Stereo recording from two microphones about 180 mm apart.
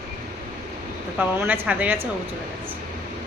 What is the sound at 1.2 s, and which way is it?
Speech, 10° right (ahead or behind).